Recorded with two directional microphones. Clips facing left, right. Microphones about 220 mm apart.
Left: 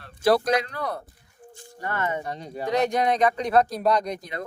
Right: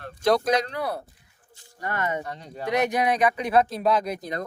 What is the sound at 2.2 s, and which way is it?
Speech, 15° left (ahead or behind).